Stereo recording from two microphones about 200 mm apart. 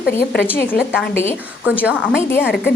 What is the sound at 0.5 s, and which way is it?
Speech, 10° left (ahead or behind).